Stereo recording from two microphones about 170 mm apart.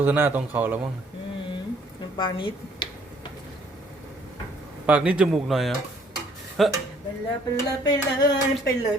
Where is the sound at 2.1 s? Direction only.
30° left (ahead or behind).